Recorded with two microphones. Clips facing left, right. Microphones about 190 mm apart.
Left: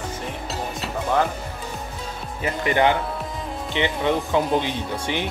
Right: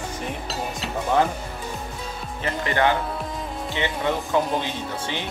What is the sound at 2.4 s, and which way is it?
Speech, 15° left (ahead or behind).